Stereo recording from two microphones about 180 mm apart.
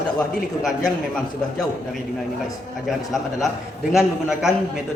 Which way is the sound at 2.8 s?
Centre (ahead or behind).